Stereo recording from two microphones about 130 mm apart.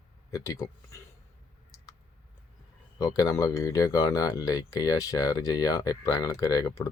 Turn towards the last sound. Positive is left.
turn(degrees=30)  # may be behind; listen again after turning